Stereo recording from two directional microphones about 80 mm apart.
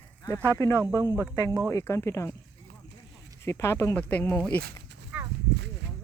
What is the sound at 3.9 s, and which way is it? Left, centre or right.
Speech, left.